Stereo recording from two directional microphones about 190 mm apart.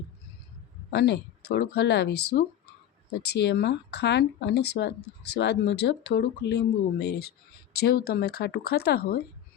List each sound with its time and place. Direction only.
0.9 s speech: 60° left (ahead or behind)